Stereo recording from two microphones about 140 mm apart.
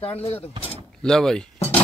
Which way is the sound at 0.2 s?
45° left (ahead or behind).